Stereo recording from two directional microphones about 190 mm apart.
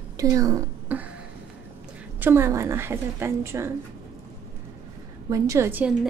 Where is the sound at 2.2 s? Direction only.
10° right (ahead or behind).